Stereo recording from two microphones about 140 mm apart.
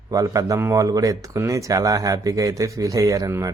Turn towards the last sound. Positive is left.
turn(degrees=-20)  # may be behind; listen again after turning